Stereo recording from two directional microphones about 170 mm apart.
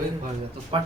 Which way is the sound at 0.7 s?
30° right (ahead or behind).